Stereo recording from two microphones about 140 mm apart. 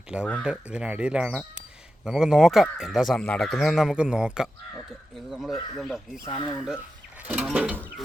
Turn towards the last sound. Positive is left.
turn(degrees=-10)  # may be behind; listen again after turning